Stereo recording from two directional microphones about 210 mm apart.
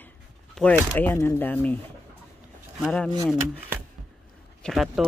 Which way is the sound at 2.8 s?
5° left (ahead or behind).